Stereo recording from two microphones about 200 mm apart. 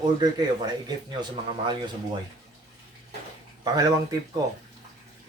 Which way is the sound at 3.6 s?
20° right (ahead or behind).